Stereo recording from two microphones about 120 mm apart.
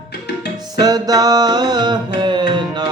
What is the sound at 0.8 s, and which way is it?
Mantra, 35° right (ahead or behind).